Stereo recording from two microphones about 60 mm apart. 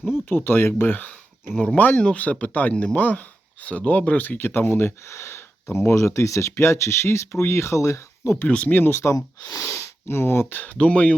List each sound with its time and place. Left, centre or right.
0.3 s speech: left
1.5 s speech: centre; by 4.9 s left
5.0 s speech: left
8.4 s speech: left
8.7 s speech: left
9.1 s speech: left